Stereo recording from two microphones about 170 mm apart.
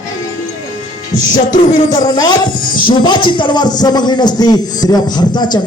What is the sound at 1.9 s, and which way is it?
A man's voice, 25° left (ahead or behind).